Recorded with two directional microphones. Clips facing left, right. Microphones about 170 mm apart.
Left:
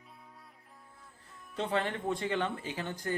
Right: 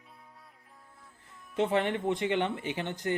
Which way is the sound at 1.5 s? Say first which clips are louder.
Right 5 dB; 20° right (ahead or behind).